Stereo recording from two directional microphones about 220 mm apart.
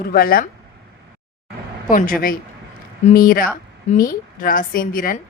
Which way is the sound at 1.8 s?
40° left (ahead or behind).